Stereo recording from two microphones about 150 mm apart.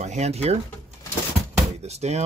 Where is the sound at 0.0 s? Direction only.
50° right (ahead or behind).